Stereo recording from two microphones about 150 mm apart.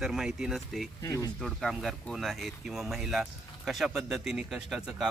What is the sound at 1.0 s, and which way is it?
Speech, 20° left (ahead or behind).